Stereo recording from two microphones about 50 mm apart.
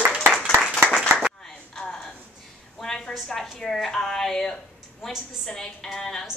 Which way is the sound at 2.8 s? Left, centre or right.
Centre.